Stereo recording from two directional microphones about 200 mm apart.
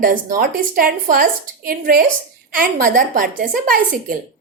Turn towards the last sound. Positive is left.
turn(degrees=-45)  # may be behind; listen again after turning